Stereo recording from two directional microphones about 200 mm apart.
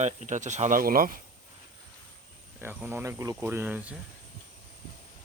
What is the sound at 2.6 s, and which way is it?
Speech, 10° right (ahead or behind).